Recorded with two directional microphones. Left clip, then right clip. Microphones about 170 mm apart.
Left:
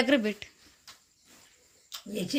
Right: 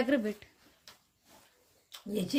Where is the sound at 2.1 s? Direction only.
45° right (ahead or behind).